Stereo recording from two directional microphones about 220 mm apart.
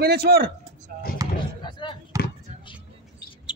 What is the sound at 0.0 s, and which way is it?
Speech, 45° right (ahead or behind).